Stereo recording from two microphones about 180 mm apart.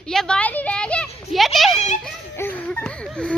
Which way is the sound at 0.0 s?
5° left (ahead or behind).